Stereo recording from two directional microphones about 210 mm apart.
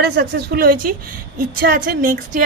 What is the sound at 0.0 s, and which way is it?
Speech, 50° right (ahead or behind).